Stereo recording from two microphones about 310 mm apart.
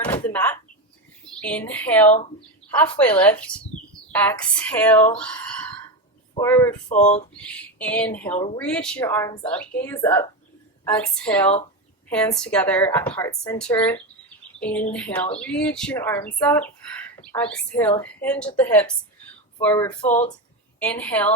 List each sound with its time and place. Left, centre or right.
0.0 s door: centre
1.3 s a woman's voice: centre
8.3 s speech: left
8.5 s a woman's voice: centre